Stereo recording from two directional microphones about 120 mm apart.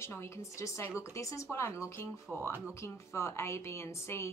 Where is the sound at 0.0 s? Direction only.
20° left (ahead or behind).